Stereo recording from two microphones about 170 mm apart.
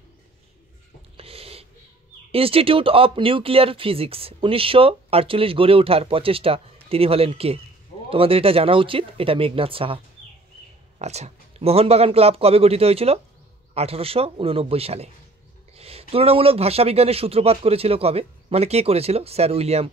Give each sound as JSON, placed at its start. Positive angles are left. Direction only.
{"t": 1.1, "sound": "a sound", "side_deg": -35}
{"t": 2.3, "sound": "speech", "side_deg": -35}
{"t": 11.0, "sound": "speech", "side_deg": -40}